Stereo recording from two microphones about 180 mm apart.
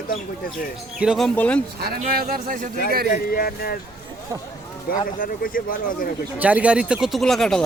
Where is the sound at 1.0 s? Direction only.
Centre (ahead or behind).